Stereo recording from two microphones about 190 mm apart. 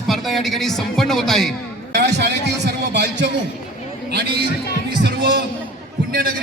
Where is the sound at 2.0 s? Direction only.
65° right (ahead or behind).